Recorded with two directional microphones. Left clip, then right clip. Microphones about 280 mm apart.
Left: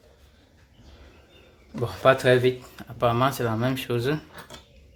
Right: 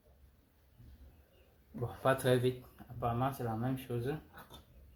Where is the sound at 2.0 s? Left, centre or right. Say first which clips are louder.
Left 12 dB; centre.